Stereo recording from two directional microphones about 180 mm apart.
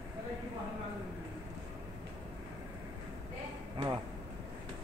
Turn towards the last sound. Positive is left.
turn(degrees=-25)  # may be behind; listen again after turning